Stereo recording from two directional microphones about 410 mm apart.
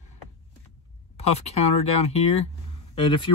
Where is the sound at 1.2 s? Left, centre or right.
Centre.